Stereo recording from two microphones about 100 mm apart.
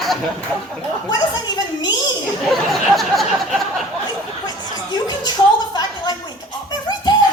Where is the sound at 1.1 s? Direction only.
45° left (ahead or behind).